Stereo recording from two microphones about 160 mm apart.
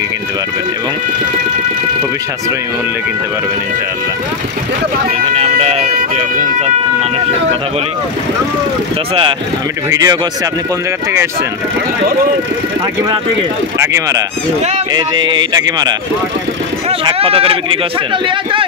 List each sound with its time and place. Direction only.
5.2 s music: 35° right (ahead or behind)
9.8 s speech: 20° right (ahead or behind)
13.7 s speech: 20° right (ahead or behind)
17.0 s music: 35° right (ahead or behind)